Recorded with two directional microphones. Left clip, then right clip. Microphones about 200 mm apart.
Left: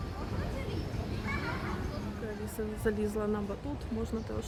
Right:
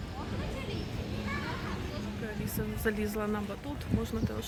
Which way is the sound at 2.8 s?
20° left (ahead or behind).